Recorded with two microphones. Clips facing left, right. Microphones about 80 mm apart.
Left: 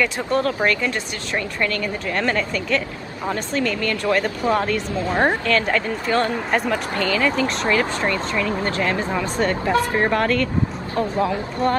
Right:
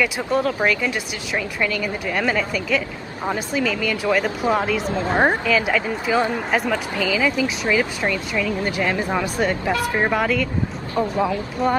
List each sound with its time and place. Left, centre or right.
0.0 s speech: centre
4.9 s a woman's voice: right
5.5 s speech: centre